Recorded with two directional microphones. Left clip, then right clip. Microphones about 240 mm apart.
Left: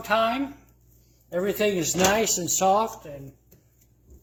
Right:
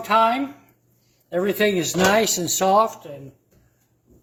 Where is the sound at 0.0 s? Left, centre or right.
Centre.